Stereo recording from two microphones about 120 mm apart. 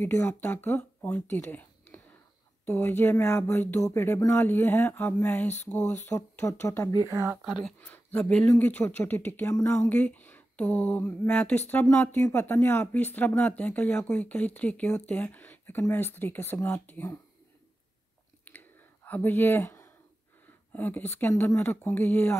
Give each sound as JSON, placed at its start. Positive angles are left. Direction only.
{"t": 0.1, "sound": "speech", "side_deg": 15}
{"t": 7.0, "sound": "speech", "side_deg": -25}
{"t": 7.8, "sound": "speech", "side_deg": 10}
{"t": 18.4, "sound": "a sound", "side_deg": 15}
{"t": 20.7, "sound": "speech", "side_deg": 15}